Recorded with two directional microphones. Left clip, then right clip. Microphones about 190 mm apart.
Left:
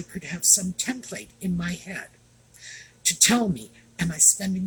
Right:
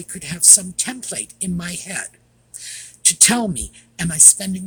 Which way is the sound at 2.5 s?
45° right (ahead or behind).